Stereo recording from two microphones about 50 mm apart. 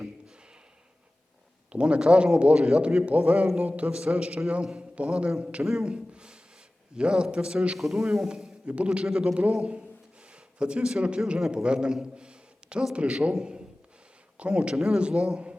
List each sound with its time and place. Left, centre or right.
1.7 s a man's voice: right
7.8 s a man's voice: centre
11.5 s a sound: centre
12.9 s a man's voice: right